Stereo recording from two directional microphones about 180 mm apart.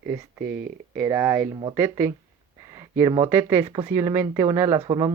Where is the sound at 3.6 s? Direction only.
25° right (ahead or behind).